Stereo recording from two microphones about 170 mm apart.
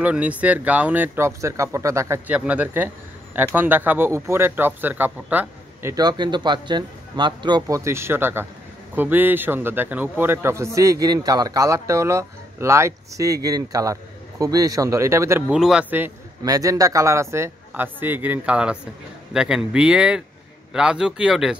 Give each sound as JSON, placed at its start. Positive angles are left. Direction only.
{"t": 0.0, "sound": "speech", "side_deg": -10}
{"t": 15.4, "sound": "speech", "side_deg": -5}
{"t": 16.4, "sound": "speech", "side_deg": -20}